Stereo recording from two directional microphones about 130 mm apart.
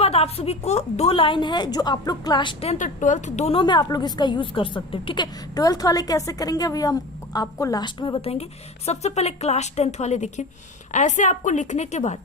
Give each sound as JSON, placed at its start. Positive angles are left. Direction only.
{"t": 0.0, "sound": "a woman's voice", "side_deg": 50}
{"t": 2.7, "sound": "a woman's voice", "side_deg": 75}
{"t": 3.5, "sound": "a woman's voice", "side_deg": 35}